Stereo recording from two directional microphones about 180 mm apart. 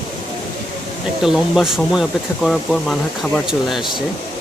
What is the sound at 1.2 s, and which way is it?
Speech, centre (ahead or behind).